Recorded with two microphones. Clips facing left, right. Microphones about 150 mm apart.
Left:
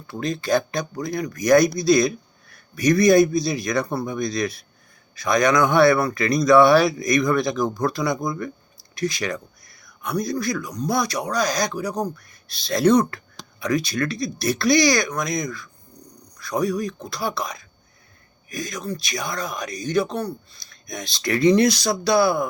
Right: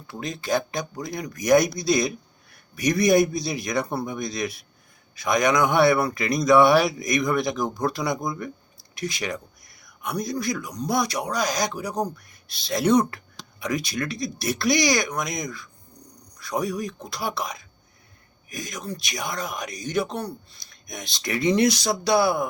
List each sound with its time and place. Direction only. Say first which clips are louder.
0.1 s speech: left 4 dB; 15° right (ahead or behind)